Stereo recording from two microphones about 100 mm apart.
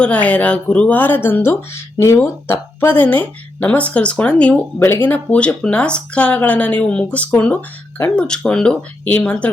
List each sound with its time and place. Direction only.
0.0 s speech: 15° left (ahead or behind)